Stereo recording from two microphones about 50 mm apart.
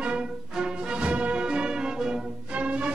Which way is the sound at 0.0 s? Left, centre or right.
Centre.